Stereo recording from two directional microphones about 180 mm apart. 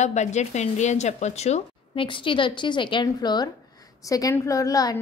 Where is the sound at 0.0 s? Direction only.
40° left (ahead or behind).